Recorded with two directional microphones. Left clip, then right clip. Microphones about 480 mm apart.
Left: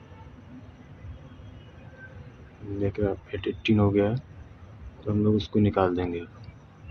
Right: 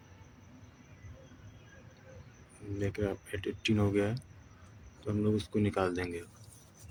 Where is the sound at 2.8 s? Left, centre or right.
Right.